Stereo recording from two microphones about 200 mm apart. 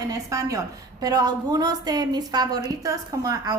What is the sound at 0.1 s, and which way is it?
A woman's voice, 15° right (ahead or behind).